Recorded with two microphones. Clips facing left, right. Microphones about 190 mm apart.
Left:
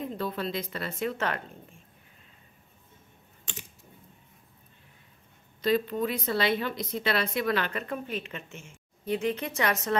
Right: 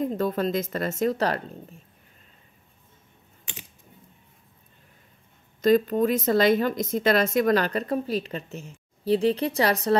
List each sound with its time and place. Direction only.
0.0 s a woman's voice: 45° right (ahead or behind)
5.6 s speech: 45° right (ahead or behind)